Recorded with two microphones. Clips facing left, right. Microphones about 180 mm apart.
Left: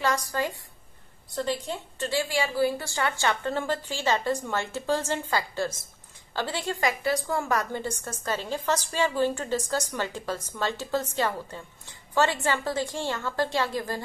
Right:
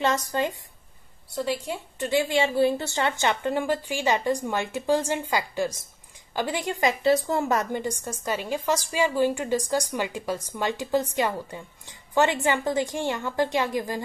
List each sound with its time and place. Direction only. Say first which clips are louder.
0.0 s a woman's voice: right 3 dB; 20° right (ahead or behind)
1.3 s a woman's voice: right 1 dB; 10° right (ahead or behind)